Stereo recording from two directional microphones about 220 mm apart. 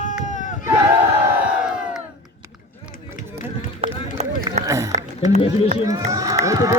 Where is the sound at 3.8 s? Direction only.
30° right (ahead or behind).